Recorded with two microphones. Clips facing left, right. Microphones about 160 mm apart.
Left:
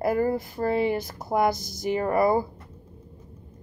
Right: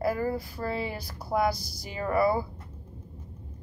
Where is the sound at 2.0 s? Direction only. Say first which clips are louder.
Left 3 dB; 45° left (ahead or behind).